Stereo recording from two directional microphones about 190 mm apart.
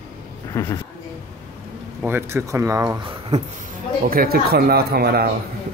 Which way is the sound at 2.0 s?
15° right (ahead or behind).